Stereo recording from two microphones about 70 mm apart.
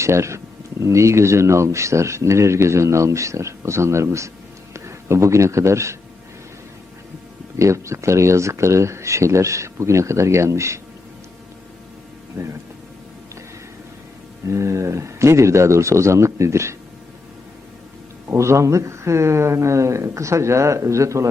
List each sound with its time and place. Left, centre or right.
0.0 s speech: right
7.6 s speech: right
14.4 s speech: right
18.3 s speech: right